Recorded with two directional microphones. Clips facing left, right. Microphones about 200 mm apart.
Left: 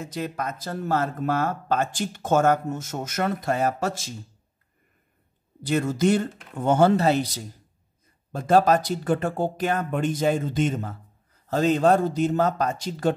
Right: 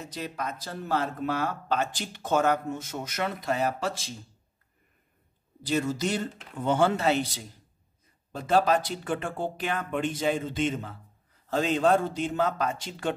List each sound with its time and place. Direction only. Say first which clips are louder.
0.0 s speech: left 5 dB; 50° left (ahead or behind)
5.7 s a man's voice: left 6 dB; 55° left (ahead or behind)